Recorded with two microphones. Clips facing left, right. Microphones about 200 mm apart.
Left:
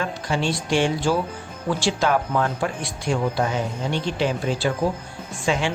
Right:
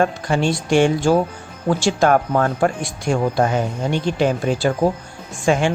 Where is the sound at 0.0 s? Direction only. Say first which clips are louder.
Right 6 dB; 50° right (ahead or behind).